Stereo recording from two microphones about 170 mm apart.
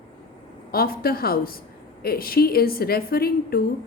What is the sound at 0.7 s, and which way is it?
Speech, 60° left (ahead or behind).